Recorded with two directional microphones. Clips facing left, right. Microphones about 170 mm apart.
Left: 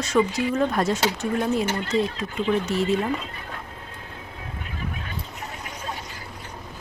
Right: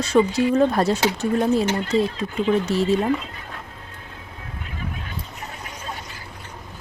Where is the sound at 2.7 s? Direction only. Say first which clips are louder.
Right 3 dB; 35° right (ahead or behind).